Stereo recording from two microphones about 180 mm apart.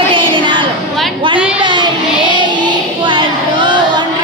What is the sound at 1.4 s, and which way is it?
Child singing, 5° right (ahead or behind).